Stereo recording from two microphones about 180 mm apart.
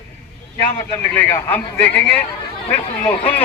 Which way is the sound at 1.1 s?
10° left (ahead or behind).